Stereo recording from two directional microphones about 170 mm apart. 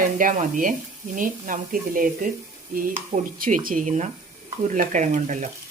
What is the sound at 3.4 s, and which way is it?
Speech, 50° right (ahead or behind).